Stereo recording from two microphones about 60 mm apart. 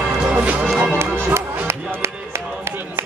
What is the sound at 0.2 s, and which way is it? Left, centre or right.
Music, right.